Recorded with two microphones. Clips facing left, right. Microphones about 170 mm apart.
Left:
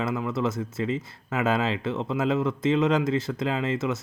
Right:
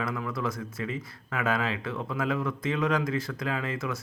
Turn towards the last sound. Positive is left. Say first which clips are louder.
# left 5 dB
turn(degrees=25)  # may be behind; listen again after turning